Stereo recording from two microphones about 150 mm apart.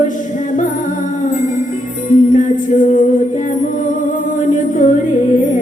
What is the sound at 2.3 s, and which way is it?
Music, 60° left (ahead or behind).